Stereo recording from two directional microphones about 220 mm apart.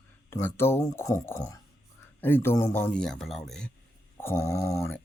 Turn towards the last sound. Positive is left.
turn(degrees=15)  # may be behind; listen again after turning